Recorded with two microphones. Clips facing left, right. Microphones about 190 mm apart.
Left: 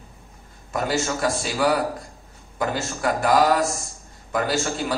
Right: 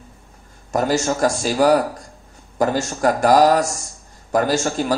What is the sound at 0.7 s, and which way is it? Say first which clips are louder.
A man's voice: right 5 dB; 40° right (ahead or behind).